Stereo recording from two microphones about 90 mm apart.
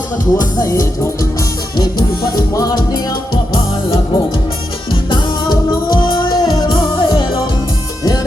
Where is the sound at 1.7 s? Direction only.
50° left (ahead or behind).